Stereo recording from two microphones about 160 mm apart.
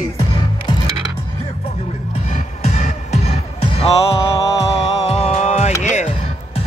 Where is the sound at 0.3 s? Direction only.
30° left (ahead or behind).